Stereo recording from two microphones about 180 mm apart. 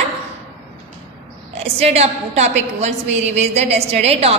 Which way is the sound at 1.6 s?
35° right (ahead or behind).